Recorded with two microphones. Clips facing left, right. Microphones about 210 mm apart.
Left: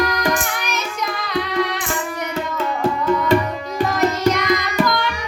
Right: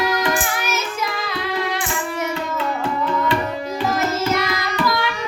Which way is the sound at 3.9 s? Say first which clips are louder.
Left 3 dB; 5° right (ahead or behind).